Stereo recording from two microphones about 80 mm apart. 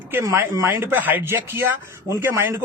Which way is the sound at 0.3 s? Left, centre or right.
Right.